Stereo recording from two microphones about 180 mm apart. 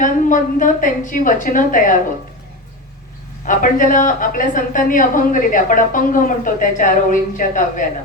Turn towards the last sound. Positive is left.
turn(degrees=45)  # may be behind; listen again after turning